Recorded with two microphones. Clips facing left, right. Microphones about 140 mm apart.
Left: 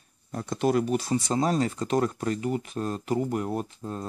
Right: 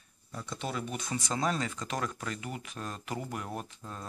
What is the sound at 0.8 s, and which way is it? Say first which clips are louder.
Speech: left 11 dB; 35° left (ahead or behind).